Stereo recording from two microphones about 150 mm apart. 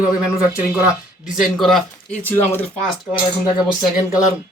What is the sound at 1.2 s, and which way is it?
Speech, centre (ahead or behind).